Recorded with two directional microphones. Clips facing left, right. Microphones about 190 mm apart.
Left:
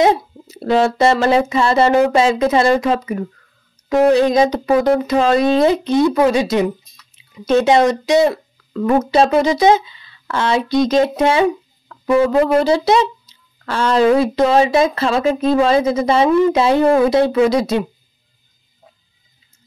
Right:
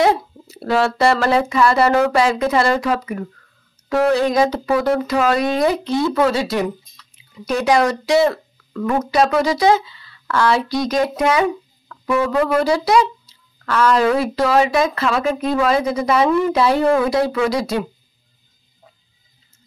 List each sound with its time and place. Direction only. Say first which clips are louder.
0.0 s speech: left 2 dB; 20° left (ahead or behind)